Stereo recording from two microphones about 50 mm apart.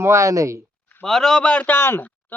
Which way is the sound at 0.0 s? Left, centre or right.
Right.